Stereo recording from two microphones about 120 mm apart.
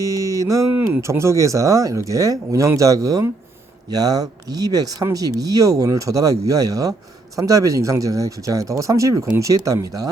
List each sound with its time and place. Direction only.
0.0 s speech: 25° right (ahead or behind)